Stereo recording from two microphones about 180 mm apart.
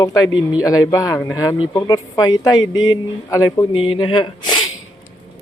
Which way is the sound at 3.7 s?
30° left (ahead or behind).